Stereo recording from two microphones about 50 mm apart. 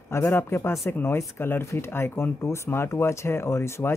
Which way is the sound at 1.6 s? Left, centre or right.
Left.